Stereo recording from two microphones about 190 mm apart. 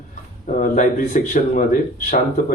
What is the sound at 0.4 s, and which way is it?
Speech, 40° left (ahead or behind).